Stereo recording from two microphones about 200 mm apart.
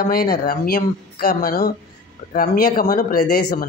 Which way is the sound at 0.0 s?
50° left (ahead or behind).